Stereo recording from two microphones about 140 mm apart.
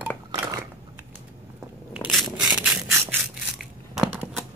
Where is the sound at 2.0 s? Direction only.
Centre (ahead or behind).